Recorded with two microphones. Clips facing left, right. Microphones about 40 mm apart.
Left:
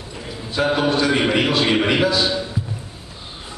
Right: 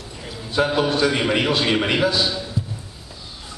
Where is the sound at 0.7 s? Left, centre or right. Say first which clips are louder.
Left 4 dB; centre.